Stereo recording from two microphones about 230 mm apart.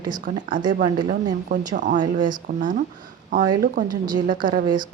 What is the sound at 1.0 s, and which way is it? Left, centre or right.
A woman's voice, right.